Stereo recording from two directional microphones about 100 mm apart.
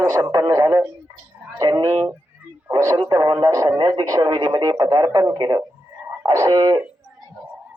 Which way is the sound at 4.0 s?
30° right (ahead or behind).